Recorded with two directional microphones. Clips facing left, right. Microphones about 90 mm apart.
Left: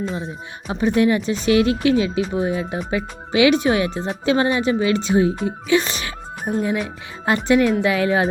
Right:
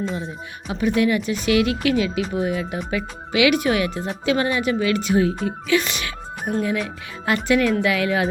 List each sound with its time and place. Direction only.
0.7 s speech: 30° left (ahead or behind)